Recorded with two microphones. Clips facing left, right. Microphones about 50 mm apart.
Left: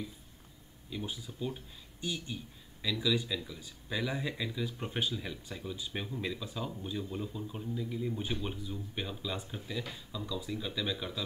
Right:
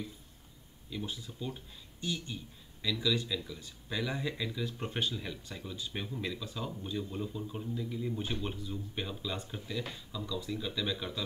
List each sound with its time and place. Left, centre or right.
0.8 s speech: centre